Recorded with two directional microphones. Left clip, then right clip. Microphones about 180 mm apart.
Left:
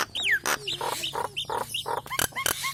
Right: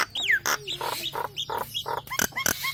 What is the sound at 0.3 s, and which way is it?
Chicken, 15° left (ahead or behind).